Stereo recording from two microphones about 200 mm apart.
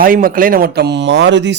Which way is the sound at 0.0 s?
45° right (ahead or behind).